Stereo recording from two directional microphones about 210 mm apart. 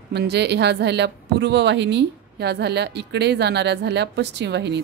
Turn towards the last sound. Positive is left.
turn(degrees=-55)  # may be behind; listen again after turning